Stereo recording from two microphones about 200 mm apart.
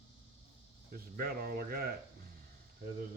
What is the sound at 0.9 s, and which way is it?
Speech, 50° right (ahead or behind).